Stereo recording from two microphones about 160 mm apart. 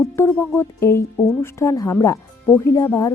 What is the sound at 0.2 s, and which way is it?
Speech, 15° left (ahead or behind).